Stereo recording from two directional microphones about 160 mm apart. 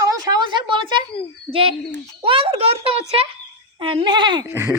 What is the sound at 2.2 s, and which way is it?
A child's voice, 35° right (ahead or behind).